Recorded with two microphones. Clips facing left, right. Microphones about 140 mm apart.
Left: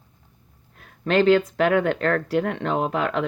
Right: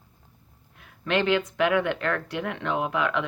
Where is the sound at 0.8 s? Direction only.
40° left (ahead or behind).